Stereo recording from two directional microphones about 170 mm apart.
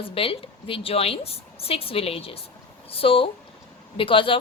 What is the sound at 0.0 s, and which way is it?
Speech, 35° left (ahead or behind).